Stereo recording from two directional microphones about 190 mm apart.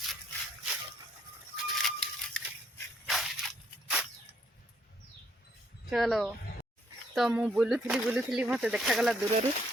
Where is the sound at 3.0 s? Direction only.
Centre (ahead or behind).